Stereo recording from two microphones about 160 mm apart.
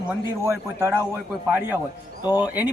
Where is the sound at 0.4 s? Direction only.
15° right (ahead or behind).